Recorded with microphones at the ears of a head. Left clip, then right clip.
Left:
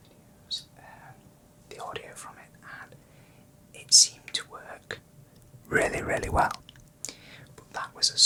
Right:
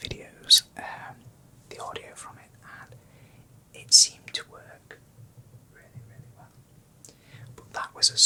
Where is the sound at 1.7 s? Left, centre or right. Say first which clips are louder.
Right 1 dB; centre.